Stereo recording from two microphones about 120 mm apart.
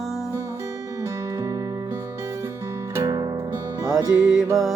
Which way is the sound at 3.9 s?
5° right (ahead or behind).